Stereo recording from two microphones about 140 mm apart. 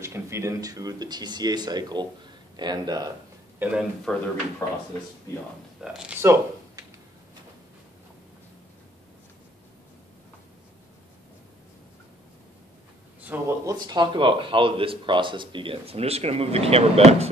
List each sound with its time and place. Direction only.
0.0 s speech: 20° right (ahead or behind)
3.5 s speech: 10° right (ahead or behind)
4.1 s speech: 5° left (ahead or behind)
4.6 s speech: 25° left (ahead or behind)
5.8 s speech: 5° right (ahead or behind)
6.2 s a sound: 25° right (ahead or behind)
13.2 s a sound: 10° right (ahead or behind)
13.7 s speech: 30° right (ahead or behind); by 17.3 s 50° right (ahead or behind)